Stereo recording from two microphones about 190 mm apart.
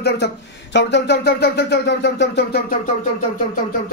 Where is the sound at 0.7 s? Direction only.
65° left (ahead or behind).